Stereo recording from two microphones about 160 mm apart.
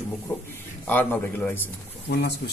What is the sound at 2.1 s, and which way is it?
Speech, 90° left.